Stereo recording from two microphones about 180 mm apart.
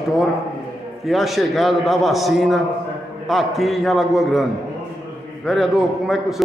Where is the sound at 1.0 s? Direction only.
Centre (ahead or behind).